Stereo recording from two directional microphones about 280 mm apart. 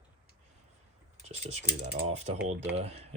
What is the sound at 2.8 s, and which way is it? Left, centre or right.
Speech, right.